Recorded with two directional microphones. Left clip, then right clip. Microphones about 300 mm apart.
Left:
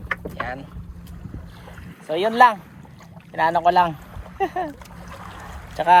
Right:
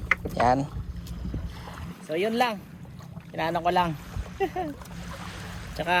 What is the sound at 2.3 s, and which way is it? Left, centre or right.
Speech, centre.